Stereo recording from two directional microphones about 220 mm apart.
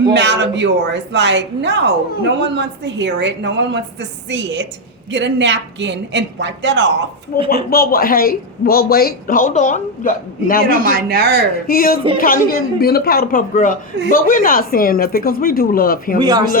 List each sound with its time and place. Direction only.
0.0 s a woman's voice: 50° right (ahead or behind)
5.1 s a woman's voice: 55° right (ahead or behind)
7.5 s a man's voice: 45° left (ahead or behind)
10.7 s speech: 40° right (ahead or behind)
11.7 s a man's voice: 40° left (ahead or behind)
16.2 s speech: 20° right (ahead or behind)